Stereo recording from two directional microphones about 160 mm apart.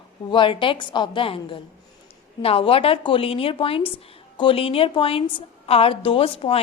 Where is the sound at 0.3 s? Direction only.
30° left (ahead or behind).